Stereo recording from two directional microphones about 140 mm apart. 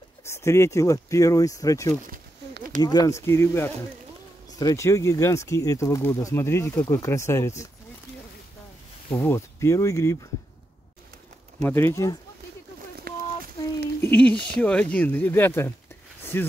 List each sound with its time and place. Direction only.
0.2 s speech: 20° left (ahead or behind)
9.1 s speech: 20° left (ahead or behind)
11.6 s speech: 15° left (ahead or behind)
13.1 s a sound: 90° right
14.1 s speech: 10° left (ahead or behind)